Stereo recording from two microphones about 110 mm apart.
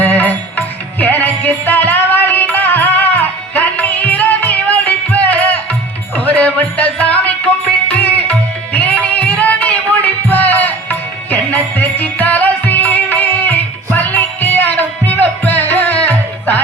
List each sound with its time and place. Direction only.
0.0 s music: 15° left (ahead or behind)
7.9 s tabla: 15° left (ahead or behind)